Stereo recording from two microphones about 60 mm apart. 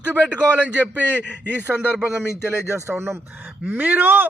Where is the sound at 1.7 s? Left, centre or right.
Centre.